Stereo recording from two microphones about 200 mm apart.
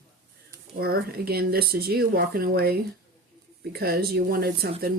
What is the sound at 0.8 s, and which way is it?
Speech, 50° right (ahead or behind).